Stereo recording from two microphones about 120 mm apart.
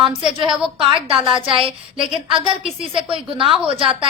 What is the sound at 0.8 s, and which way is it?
Speech, 45° right (ahead or behind).